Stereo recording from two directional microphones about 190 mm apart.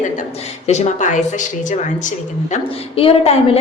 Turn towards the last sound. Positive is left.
turn(degrees=30)  # may be behind; listen again after turning